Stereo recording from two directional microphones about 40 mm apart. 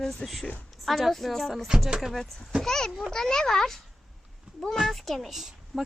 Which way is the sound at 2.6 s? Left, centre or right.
Centre.